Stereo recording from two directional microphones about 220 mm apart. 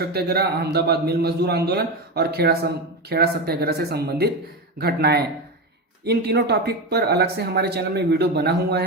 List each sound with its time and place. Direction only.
0.0 s a man's voice: 45° right (ahead or behind)